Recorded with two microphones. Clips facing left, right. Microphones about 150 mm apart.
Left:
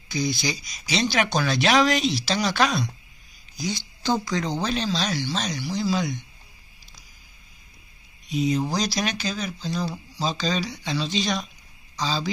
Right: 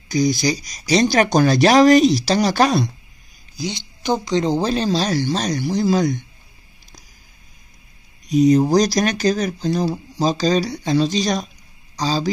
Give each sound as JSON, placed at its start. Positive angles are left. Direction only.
{"t": 0.1, "sound": "speech", "side_deg": -45}
{"t": 3.5, "sound": "speech", "side_deg": -20}
{"t": 8.3, "sound": "speech", "side_deg": -45}